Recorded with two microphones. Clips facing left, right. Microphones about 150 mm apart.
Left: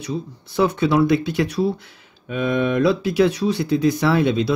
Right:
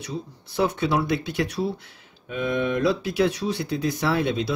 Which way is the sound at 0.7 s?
90° left.